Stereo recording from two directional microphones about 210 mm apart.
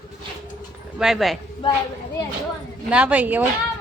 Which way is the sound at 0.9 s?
Centre (ahead or behind).